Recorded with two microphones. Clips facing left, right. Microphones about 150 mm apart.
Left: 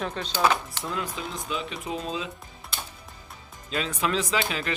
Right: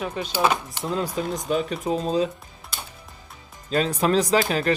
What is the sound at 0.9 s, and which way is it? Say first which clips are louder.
Speech: right 7 dB; 40° right (ahead or behind).